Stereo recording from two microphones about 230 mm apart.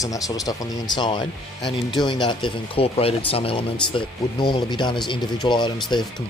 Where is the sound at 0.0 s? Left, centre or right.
Centre.